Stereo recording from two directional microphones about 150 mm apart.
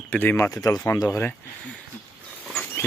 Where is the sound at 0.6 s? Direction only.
25° left (ahead or behind).